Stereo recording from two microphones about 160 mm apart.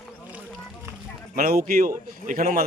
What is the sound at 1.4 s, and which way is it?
A man's voice, 65° right (ahead or behind).